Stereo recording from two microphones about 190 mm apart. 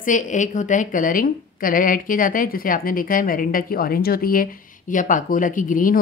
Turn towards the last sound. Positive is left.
turn(degrees=45)  # may be behind; listen again after turning